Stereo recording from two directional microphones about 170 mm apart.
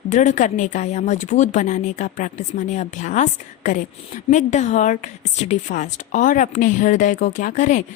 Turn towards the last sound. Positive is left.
turn(degrees=45)  # may be behind; listen again after turning